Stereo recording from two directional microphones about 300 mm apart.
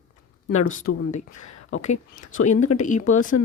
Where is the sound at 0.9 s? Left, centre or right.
Left.